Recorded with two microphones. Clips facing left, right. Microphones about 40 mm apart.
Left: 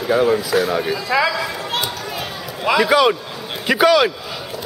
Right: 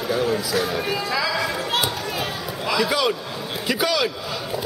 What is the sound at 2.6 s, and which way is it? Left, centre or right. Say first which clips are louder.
Speech: left 7 dB; left.